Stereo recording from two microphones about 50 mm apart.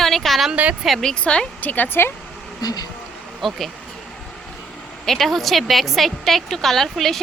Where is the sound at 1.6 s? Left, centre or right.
Left.